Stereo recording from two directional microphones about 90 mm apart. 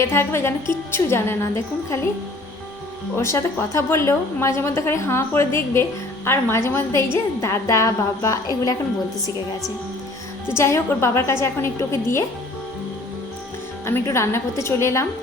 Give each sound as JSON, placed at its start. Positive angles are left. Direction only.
{"t": 0.0, "sound": "speech", "side_deg": 30}
{"t": 3.2, "sound": "a woman's voice", "side_deg": 30}
{"t": 10.6, "sound": "a woman's voice", "side_deg": 30}
{"t": 13.8, "sound": "speech", "side_deg": 30}